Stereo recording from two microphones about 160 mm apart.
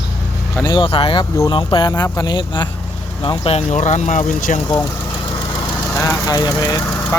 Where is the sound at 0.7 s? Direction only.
35° left (ahead or behind).